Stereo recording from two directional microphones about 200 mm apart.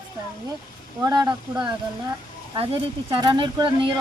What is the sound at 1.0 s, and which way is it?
Speech, 20° right (ahead or behind).